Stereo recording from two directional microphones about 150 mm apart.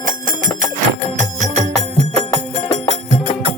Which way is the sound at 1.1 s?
50° right (ahead or behind).